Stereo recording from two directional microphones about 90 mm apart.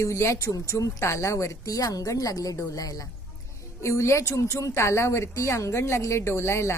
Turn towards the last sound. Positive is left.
turn(degrees=30)  # may be behind; listen again after turning